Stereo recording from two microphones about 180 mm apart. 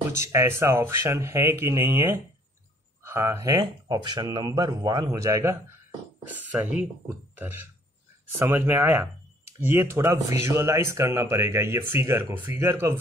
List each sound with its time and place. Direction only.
0.1 s speech: 15° right (ahead or behind)
6.6 s speech: 5° right (ahead or behind)